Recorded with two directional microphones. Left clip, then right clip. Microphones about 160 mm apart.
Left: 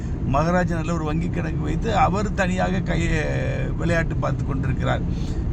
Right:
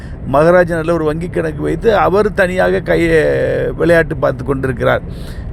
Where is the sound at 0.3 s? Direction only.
40° right (ahead or behind).